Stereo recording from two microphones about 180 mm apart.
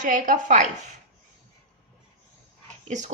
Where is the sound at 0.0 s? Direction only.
45° right (ahead or behind).